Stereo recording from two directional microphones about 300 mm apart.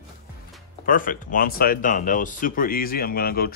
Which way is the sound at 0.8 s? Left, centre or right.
Left.